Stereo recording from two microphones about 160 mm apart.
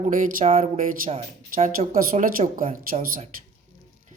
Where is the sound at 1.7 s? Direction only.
60° right (ahead or behind).